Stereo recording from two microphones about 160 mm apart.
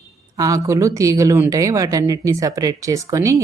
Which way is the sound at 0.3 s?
20° right (ahead or behind).